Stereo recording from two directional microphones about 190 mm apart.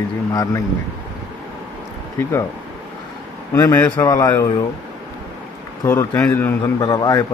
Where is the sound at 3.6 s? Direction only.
15° left (ahead or behind).